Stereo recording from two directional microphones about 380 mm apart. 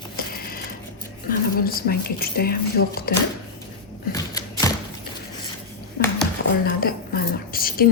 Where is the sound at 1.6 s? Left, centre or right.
Left.